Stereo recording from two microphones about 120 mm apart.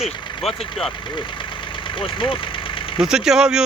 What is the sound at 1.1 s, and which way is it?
Engine, 45° left (ahead or behind).